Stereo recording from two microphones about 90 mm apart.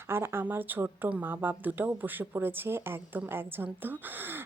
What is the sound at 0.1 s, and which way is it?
Speech, 25° right (ahead or behind).